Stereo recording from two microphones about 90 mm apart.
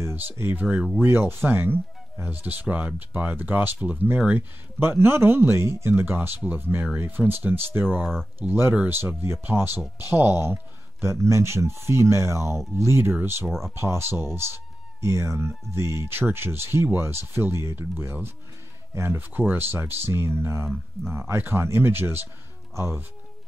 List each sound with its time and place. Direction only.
0.0 s speech: 20° right (ahead or behind)
1.0 s speech: 25° right (ahead or behind)
7.9 s speech: 5° left (ahead or behind)
8.4 s speech: 25° right (ahead or behind)
13.5 s speech: 5° left (ahead or behind)
13.7 s speech: 30° right (ahead or behind)